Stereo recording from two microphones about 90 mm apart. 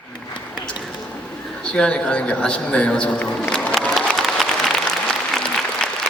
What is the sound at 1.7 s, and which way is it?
A man's voice, 10° left (ahead or behind).